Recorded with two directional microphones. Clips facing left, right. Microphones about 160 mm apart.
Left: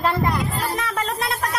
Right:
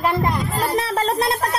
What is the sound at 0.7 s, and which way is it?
Speech, 35° right (ahead or behind).